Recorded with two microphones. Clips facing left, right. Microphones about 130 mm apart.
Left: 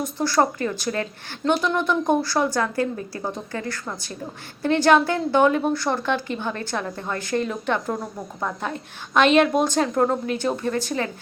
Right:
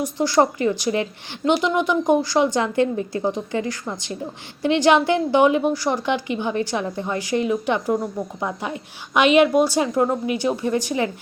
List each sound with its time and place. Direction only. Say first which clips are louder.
0.0 s a woman's voice: right 3 dB; 15° right (ahead or behind)